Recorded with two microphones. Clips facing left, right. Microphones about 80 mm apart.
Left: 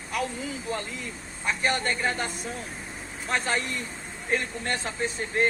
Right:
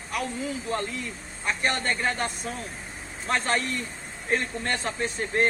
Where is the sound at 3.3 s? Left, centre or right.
Right.